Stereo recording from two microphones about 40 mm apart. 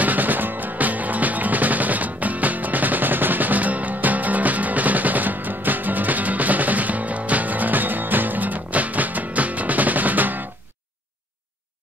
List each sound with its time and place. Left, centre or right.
0.0 s music: right